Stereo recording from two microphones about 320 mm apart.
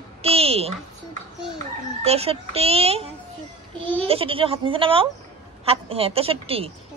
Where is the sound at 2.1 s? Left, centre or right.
Centre.